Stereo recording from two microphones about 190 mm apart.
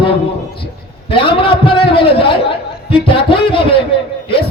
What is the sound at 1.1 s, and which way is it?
A man's voice, 25° left (ahead or behind).